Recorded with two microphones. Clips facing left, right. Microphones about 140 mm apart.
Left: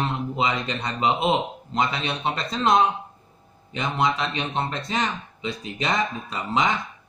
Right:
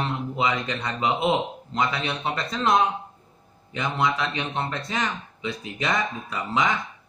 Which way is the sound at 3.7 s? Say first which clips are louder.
Left 1 dB; 25° left (ahead or behind).